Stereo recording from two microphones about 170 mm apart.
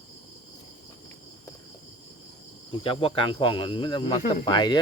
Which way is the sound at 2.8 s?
30° left (ahead or behind).